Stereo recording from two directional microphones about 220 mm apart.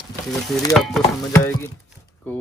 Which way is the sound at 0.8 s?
Centre (ahead or behind).